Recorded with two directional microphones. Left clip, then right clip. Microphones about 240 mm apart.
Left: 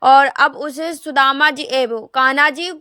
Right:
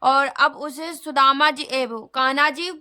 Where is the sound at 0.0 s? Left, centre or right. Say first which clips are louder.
Left 7 dB; centre.